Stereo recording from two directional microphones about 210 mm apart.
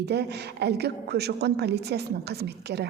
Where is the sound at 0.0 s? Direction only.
50° right (ahead or behind).